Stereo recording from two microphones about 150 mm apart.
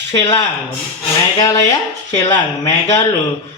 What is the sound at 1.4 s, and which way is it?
Speech, 25° left (ahead or behind).